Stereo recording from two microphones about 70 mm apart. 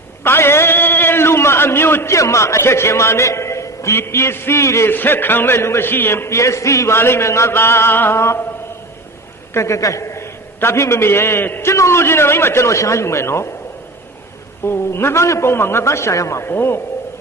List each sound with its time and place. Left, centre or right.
0.3 s a sound: left
4.9 s a man's voice: left
9.6 s a man's voice: left
11.7 s a man's voice: left
14.6 s a man's voice: left
16.5 s a man's voice: left